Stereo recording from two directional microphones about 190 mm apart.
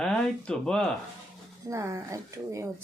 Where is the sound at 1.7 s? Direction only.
15° right (ahead or behind).